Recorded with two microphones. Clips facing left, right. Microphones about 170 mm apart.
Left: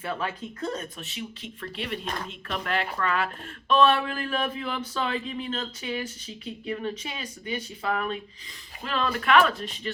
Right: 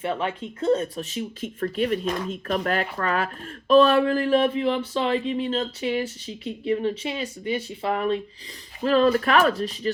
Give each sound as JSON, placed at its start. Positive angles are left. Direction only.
{"t": 0.0, "sound": "speech", "side_deg": -25}